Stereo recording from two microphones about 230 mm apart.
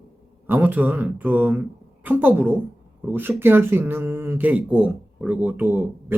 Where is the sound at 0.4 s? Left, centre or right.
Centre.